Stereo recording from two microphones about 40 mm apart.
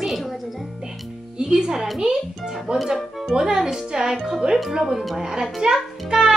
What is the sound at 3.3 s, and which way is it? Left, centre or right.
A child's voice, centre.